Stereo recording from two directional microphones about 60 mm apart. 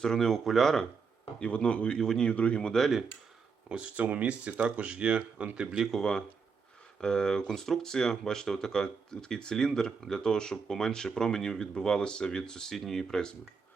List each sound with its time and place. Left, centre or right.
0.0 s speech: centre
1.4 s speech: centre
3.7 s speech: centre
5.9 s speech: centre